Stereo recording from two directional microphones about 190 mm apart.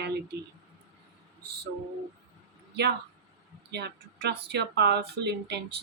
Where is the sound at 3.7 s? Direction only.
60° right (ahead or behind).